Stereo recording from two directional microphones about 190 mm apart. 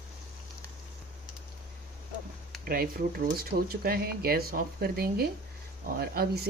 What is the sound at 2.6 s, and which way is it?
Speech, 50° right (ahead or behind).